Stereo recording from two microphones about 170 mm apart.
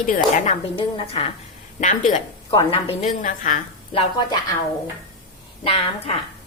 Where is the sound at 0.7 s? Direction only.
35° left (ahead or behind).